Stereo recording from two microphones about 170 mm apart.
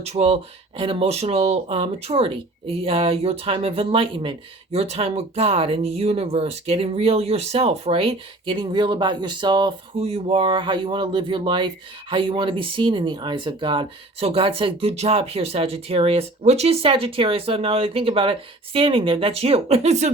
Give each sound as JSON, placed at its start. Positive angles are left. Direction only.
{"t": 0.0, "sound": "speech", "side_deg": -35}